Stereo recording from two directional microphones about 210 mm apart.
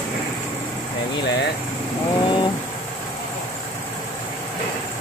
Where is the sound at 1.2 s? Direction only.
55° left (ahead or behind).